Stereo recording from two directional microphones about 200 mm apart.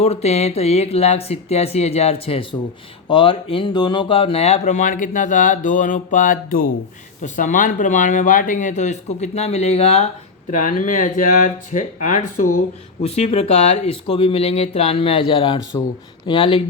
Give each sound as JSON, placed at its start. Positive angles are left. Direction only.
{"t": 0.0, "sound": "speech", "side_deg": 30}